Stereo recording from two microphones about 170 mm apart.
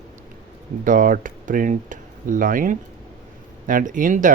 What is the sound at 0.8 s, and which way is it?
Speech, 50° right (ahead or behind).